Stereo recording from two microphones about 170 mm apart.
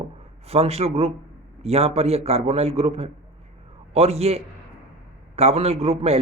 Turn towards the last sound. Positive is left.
turn(degrees=-35)  # may be behind; listen again after turning